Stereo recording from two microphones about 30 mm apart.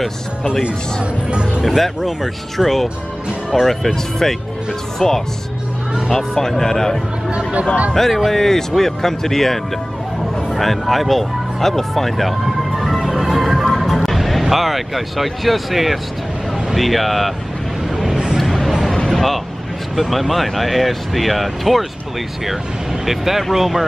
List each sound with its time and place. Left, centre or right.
2.5 s speech: centre
7.2 s speech: right
7.9 s speech: centre
10.6 s speech: centre
13.0 s music: centre
14.5 s speech: centre
17.9 s a sound: centre
18.9 s vehicle: centre
20.0 s speech: centre
23.0 s speech: centre